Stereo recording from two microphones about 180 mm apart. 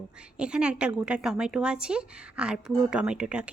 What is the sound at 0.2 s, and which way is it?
A woman's voice, 5° right (ahead or behind).